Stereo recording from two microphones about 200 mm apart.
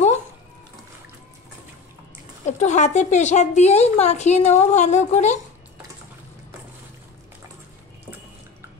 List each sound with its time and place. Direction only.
2.6 s a woman's voice: 35° left (ahead or behind)